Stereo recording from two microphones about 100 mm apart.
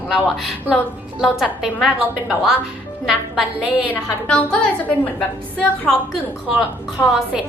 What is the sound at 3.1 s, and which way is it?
Speech, 5° right (ahead or behind).